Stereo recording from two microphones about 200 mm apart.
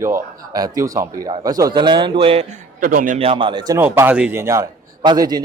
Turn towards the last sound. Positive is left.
turn(degrees=-20)  # may be behind; listen again after turning